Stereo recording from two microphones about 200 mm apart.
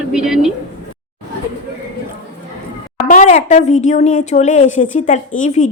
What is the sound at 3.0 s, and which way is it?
Speech, 40° left (ahead or behind).